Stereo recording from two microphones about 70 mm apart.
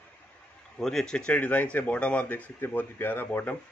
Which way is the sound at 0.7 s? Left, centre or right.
Centre.